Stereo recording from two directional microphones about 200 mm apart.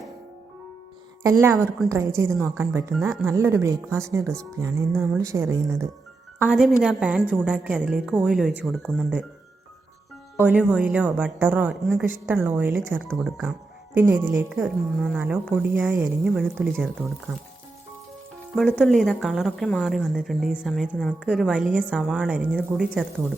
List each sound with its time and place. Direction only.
1.2 s a woman's voice: 15° right (ahead or behind)
6.5 s a woman's voice: 5° right (ahead or behind)
10.3 s a woman's voice: 10° right (ahead or behind)
18.5 s a woman's voice: centre (ahead or behind)